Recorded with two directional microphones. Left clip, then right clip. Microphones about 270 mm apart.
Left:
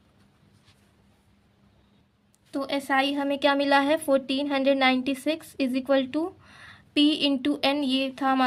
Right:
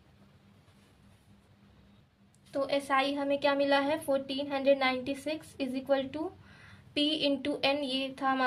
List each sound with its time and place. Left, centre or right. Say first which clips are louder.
2.5 s a woman's voice: left 3 dB; left